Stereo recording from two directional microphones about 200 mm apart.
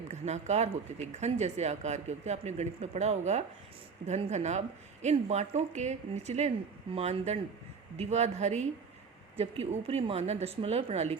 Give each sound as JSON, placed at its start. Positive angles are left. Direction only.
{"t": 0.1, "sound": "speech", "side_deg": -35}